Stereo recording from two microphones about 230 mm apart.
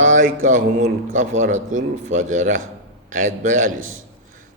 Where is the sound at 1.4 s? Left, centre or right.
Right.